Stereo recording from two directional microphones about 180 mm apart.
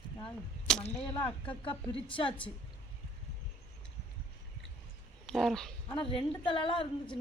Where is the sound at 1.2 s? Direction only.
30° left (ahead or behind).